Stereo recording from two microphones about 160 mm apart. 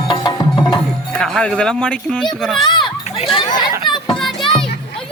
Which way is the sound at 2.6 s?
30° left (ahead or behind).